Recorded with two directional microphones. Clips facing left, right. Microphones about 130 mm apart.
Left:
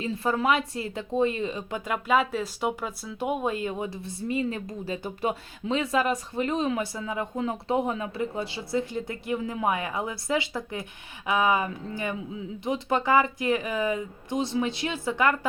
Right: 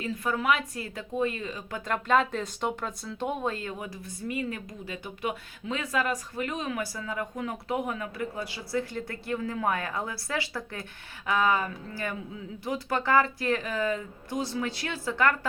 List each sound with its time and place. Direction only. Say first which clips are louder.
0.0 s speech: left 3 dB; 30° left (ahead or behind)
1.8 s speech: even; 5° left (ahead or behind)